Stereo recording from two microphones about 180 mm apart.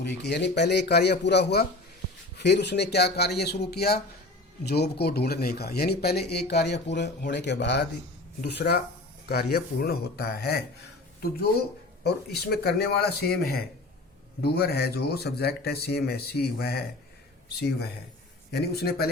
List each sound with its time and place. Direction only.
0.0 s a man's voice: 70° left (ahead or behind)
12.0 s speech: 60° left (ahead or behind)
18.5 s speech: 65° left (ahead or behind)